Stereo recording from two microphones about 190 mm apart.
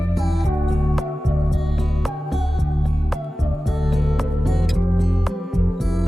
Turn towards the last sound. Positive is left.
turn(degrees=0)  # may be behind; listen again after turning